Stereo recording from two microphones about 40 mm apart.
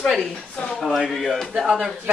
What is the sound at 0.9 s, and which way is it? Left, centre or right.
Speech, centre.